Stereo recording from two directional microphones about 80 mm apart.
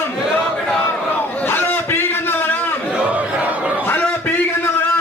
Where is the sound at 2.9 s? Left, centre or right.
Centre.